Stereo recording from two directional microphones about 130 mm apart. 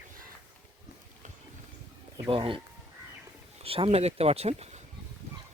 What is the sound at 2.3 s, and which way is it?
Speech, 40° right (ahead or behind).